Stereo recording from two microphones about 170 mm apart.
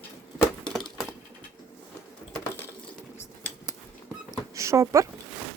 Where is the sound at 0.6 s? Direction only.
Centre (ahead or behind).